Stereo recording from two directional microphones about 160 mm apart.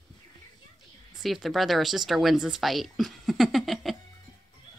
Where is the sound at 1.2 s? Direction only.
Centre (ahead or behind).